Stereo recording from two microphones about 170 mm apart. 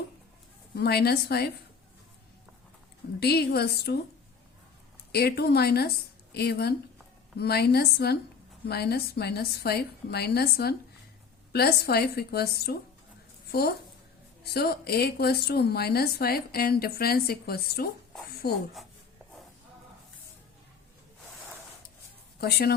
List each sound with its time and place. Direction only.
0.8 s a woman's voice: 70° left (ahead or behind)
3.2 s a woman's voice: 70° left (ahead or behind)
5.1 s a woman's voice: 70° left (ahead or behind)
22.4 s speech: 65° left (ahead or behind)